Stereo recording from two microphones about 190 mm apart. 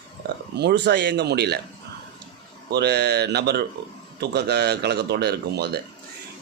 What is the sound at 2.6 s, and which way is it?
Speech, 60° right (ahead or behind).